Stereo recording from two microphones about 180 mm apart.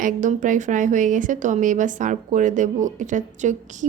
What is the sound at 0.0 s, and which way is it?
Speech, 45° right (ahead or behind).